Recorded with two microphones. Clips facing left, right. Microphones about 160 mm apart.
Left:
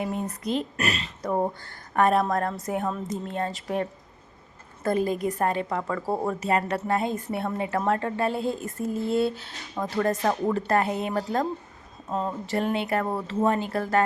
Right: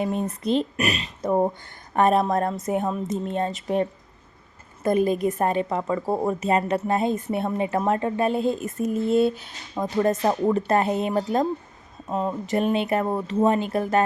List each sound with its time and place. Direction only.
0.0 s a woman's voice: 20° right (ahead or behind)
0.8 s a woman's voice: 15° right (ahead or behind)